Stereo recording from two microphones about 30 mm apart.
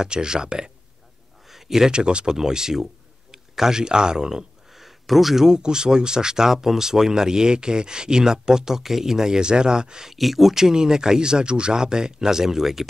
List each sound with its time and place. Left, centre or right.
0.0 s speech: right
1.5 s a sound: centre
1.9 s speech: right
2.3 s speech: centre
4.7 s a sound: centre
5.5 s speech: right
6.5 s speech: centre
9.4 s speech: right
10.1 s speech: centre
10.5 s speech: centre